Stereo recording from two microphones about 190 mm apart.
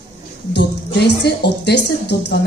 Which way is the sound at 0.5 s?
65° left (ahead or behind).